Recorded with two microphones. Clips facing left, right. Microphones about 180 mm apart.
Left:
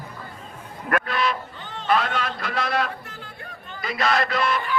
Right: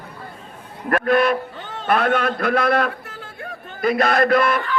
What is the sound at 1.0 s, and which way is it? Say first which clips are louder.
A man's voice: right 8 dB; 55° right (ahead or behind).